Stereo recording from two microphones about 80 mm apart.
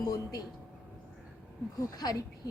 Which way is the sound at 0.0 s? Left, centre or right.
Left.